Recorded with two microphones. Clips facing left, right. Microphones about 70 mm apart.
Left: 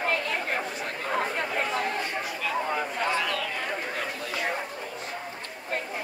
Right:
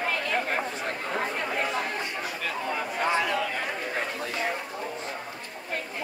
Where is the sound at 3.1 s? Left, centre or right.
Right.